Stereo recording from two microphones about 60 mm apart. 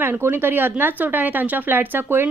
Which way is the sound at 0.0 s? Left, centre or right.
Right.